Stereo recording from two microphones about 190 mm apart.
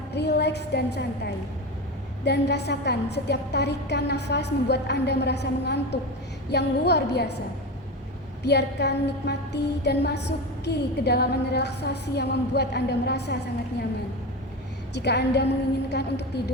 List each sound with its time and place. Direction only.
0.1 s a woman's voice: 60° left (ahead or behind)
2.2 s music: 60° left (ahead or behind)
8.4 s music: 60° left (ahead or behind)
14.9 s music: 60° left (ahead or behind)